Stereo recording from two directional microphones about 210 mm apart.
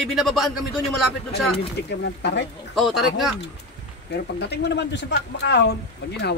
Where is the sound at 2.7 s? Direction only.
Centre (ahead or behind).